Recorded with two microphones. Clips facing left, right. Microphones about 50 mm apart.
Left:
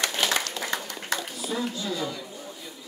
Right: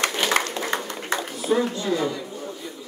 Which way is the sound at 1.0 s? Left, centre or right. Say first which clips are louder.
Right 6 dB; right.